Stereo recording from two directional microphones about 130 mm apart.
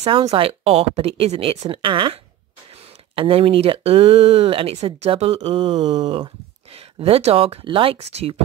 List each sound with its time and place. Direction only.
0.0 s speech: 55° right (ahead or behind); by 2.1 s 40° right (ahead or behind)
3.2 s speech: 45° right (ahead or behind)